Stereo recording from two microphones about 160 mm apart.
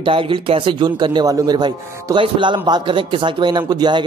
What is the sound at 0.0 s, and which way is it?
A man's voice, 35° right (ahead or behind).